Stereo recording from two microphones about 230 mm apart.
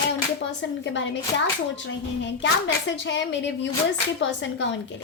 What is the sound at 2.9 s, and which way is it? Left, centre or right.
Speech, left.